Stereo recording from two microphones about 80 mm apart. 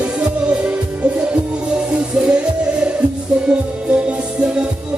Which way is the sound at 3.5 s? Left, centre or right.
Centre.